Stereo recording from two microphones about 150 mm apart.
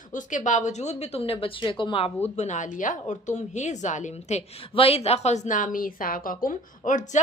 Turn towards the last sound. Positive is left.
turn(degrees=60)  # may be behind; listen again after turning